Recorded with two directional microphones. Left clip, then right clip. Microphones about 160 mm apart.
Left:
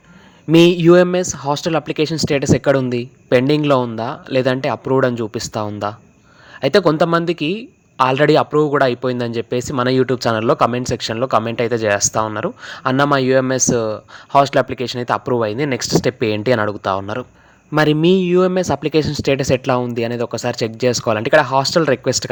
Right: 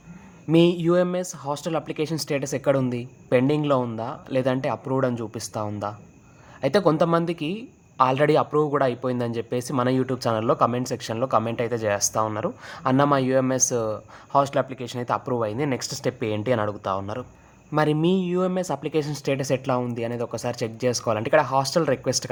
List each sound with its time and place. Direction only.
0.5 s a man's voice: 30° left (ahead or behind)